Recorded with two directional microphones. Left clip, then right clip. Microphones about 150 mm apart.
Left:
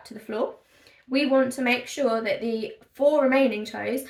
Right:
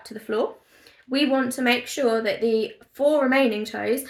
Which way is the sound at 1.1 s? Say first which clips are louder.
Left 1 dB; 20° left (ahead or behind).